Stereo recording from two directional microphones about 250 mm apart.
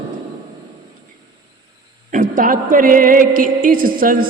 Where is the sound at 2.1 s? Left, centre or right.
Right.